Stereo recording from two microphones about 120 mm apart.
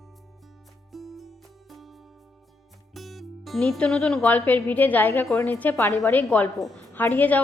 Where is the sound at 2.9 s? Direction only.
Centre (ahead or behind).